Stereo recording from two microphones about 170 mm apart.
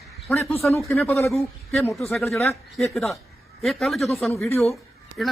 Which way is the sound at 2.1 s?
Centre (ahead or behind).